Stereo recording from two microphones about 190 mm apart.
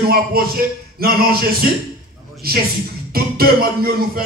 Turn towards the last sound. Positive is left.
turn(degrees=-50)  # may be behind; listen again after turning